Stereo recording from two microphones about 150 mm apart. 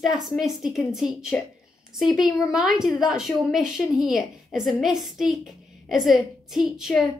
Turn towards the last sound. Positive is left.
turn(degrees=-5)  # may be behind; listen again after turning